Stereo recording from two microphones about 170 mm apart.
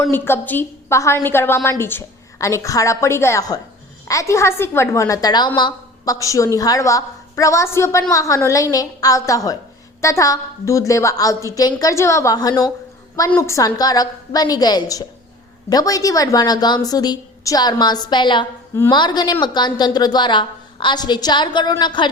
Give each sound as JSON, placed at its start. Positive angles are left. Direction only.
{"t": 0.0, "sound": "a woman's voice", "side_deg": 15}